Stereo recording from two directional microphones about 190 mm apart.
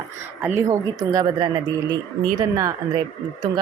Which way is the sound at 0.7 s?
20° right (ahead or behind).